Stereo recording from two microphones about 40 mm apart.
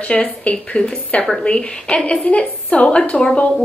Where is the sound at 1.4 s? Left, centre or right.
Left.